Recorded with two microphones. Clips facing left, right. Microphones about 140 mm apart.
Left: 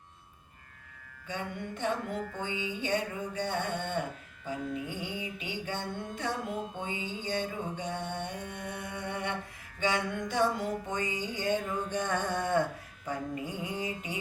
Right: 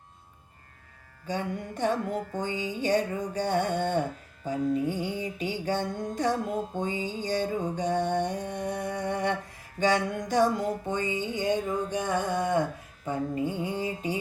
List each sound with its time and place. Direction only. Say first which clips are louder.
1.3 s music: right 5 dB; 35° right (ahead or behind); by 12.6 s 15° right (ahead or behind)
13.1 s music: right 6 dB; 25° right (ahead or behind)